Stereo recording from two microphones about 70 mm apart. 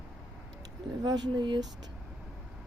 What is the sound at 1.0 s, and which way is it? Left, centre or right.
Speech, right.